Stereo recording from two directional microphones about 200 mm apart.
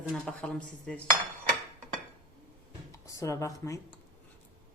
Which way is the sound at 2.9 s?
15° left (ahead or behind).